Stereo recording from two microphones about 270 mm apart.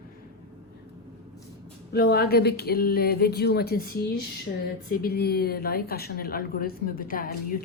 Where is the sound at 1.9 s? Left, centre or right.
Left.